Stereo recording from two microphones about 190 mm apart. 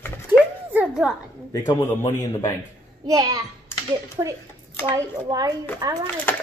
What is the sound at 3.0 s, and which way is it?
A child's voice, 20° right (ahead or behind).